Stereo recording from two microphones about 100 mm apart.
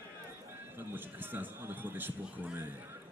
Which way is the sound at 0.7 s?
20° right (ahead or behind).